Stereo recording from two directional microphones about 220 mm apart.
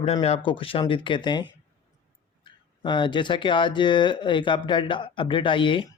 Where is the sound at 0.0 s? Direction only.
25° left (ahead or behind).